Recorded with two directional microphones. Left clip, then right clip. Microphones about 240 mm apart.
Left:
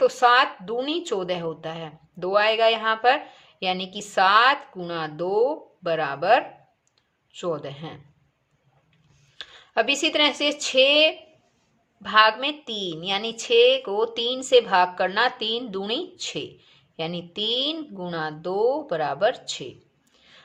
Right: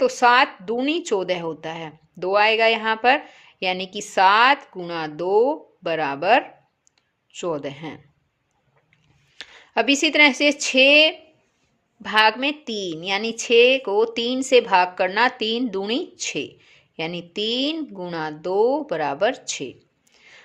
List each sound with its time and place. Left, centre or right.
0.0 s a woman's voice: right
9.4 s a woman's voice: right